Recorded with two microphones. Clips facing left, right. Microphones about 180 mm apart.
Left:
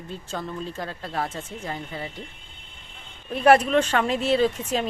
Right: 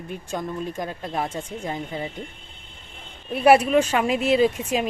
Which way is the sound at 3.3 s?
10° right (ahead or behind).